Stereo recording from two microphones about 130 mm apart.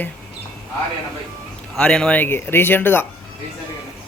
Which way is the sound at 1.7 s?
5° left (ahead or behind).